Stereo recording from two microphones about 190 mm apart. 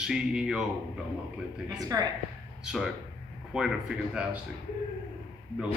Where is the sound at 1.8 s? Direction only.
20° right (ahead or behind).